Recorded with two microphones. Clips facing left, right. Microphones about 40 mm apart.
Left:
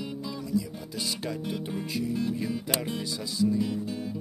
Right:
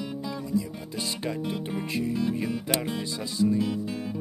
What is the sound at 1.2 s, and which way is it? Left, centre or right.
Speech, right.